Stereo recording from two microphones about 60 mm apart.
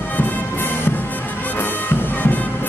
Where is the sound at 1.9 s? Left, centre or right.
Left.